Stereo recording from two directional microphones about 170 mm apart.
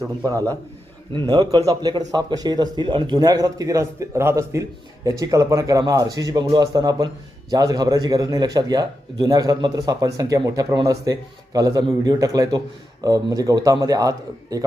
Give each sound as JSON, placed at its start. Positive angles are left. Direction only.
{"t": 0.0, "sound": "speech", "side_deg": -20}